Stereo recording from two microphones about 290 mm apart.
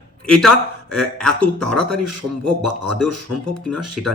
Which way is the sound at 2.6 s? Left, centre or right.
Right.